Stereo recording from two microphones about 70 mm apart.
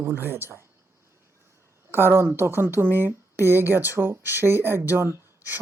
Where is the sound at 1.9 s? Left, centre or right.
Right.